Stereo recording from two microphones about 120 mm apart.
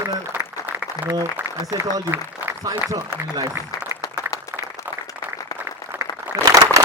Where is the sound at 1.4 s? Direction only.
20° right (ahead or behind).